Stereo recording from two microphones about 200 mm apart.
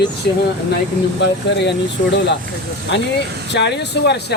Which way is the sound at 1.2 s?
60° left (ahead or behind).